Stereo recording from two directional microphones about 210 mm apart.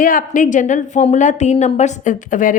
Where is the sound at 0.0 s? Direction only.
40° left (ahead or behind).